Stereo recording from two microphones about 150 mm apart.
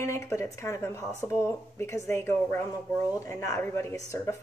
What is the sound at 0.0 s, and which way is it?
Speech, 20° left (ahead or behind).